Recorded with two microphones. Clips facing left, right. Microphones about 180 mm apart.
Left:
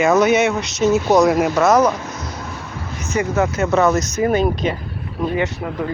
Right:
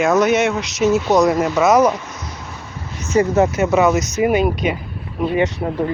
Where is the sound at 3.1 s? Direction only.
35° right (ahead or behind).